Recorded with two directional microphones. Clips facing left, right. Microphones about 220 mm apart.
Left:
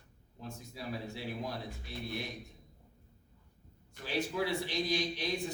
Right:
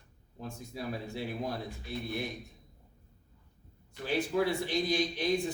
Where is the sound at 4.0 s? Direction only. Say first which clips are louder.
Right 5 dB; 50° right (ahead or behind).